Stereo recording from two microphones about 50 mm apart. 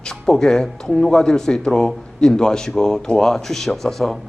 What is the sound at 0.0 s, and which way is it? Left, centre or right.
A man's voice, centre.